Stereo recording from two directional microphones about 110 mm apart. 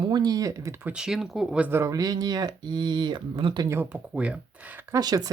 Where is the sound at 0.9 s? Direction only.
5° right (ahead or behind).